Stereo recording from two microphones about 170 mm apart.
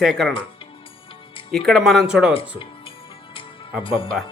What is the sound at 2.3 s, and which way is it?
Speech, 30° left (ahead or behind).